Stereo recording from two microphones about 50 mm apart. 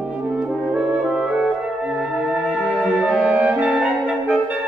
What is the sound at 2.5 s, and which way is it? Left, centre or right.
Music, left.